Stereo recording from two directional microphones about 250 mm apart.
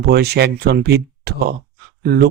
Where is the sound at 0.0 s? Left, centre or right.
Right.